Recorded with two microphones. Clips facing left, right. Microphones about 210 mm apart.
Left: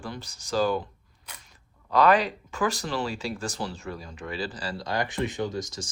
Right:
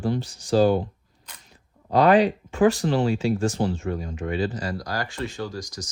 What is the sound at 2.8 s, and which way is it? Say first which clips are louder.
Speech: right 8 dB; 40° right (ahead or behind).